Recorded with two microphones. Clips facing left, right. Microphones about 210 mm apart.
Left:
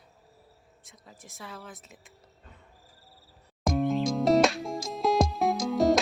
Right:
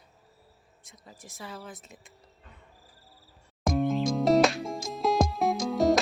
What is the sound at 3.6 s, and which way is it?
Music, centre (ahead or behind).